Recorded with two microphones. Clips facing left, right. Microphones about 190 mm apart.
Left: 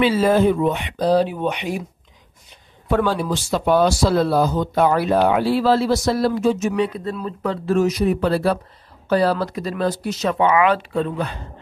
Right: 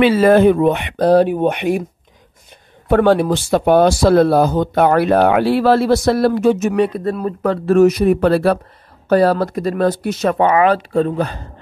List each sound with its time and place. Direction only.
0.0 s speech: 65° right (ahead or behind)
2.9 s speech: 60° right (ahead or behind)
9.1 s speech: 50° right (ahead or behind)